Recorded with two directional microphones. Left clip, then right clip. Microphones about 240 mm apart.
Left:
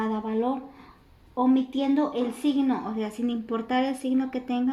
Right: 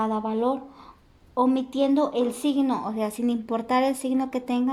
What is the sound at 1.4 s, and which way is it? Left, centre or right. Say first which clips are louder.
A woman's voice: right 2 dB; right.